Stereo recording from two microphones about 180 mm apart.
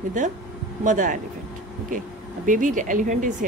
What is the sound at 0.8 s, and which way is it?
Speech, 45° right (ahead or behind).